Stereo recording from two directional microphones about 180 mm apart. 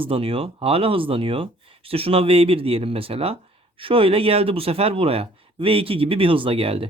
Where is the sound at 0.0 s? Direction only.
30° right (ahead or behind).